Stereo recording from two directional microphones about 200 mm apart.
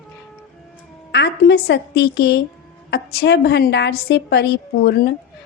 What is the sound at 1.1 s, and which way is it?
A woman's voice, 55° left (ahead or behind).